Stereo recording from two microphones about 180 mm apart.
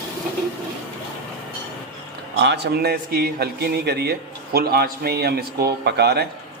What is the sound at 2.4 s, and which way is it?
A man's voice, 75° right (ahead or behind).